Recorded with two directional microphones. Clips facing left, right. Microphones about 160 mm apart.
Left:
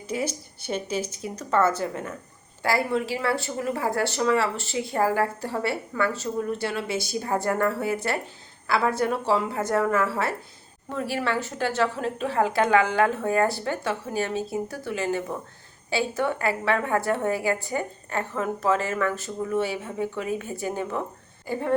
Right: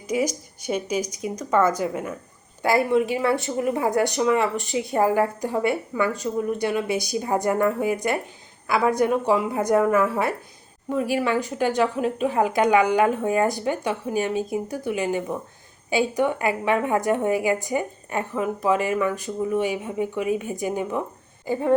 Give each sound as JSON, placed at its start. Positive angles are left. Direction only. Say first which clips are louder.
{"t": 0.1, "sound": "a woman's voice", "louder": "right 5 dB", "side_deg": -10}